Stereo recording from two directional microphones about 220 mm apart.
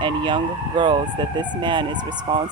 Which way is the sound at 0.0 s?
20° right (ahead or behind).